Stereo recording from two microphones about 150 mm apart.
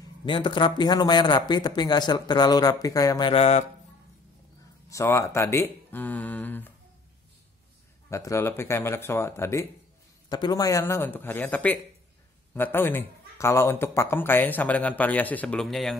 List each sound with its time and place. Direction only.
0.2 s speech: 35° left (ahead or behind)
4.8 s speech: 20° left (ahead or behind)
8.1 s speech: 20° left (ahead or behind); by 16.0 s centre (ahead or behind)